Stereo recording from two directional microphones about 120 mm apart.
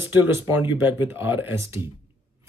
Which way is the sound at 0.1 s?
20° right (ahead or behind).